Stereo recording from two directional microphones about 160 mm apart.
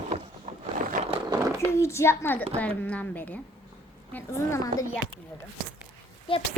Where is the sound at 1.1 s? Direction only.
25° right (ahead or behind).